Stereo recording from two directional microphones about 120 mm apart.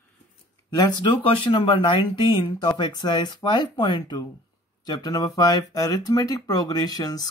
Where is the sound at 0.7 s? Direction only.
35° left (ahead or behind).